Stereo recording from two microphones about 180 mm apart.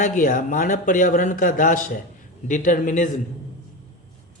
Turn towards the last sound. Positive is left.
turn(degrees=45)  # may be behind; listen again after turning